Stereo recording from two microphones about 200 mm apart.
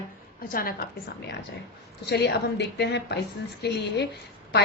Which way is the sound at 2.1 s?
55° left (ahead or behind).